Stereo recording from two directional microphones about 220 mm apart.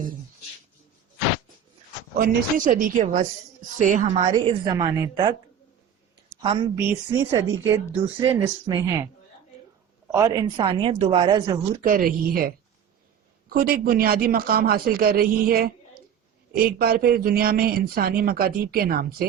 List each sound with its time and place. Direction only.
2.1 s a woman's voice: 40° right (ahead or behind); by 5.4 s 20° right (ahead or behind)
6.4 s a woman's voice: 25° right (ahead or behind)
6.7 s a woman's voice: 10° right (ahead or behind)
10.1 s speech: 15° right (ahead or behind)
11.8 s a woman's voice: 40° right (ahead or behind)